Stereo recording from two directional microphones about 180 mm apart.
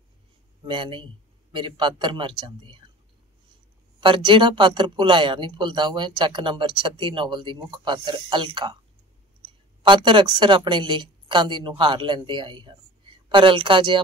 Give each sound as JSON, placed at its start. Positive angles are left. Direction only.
{"t": 0.7, "sound": "speech", "side_deg": -25}
{"t": 4.0, "sound": "a woman's voice", "side_deg": -30}